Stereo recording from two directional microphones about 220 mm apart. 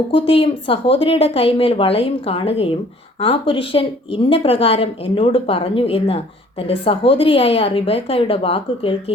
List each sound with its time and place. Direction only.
0.1 s speech: 25° left (ahead or behind)